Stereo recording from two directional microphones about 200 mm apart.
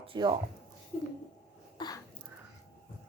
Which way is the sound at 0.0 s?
25° right (ahead or behind).